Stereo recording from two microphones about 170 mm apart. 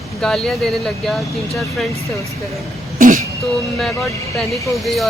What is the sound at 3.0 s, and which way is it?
Throat clearing, 50° right (ahead or behind).